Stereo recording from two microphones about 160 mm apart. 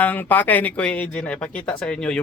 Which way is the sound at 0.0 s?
10° left (ahead or behind).